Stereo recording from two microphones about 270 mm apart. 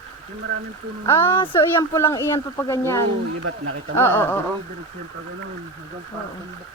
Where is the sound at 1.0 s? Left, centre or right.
Centre.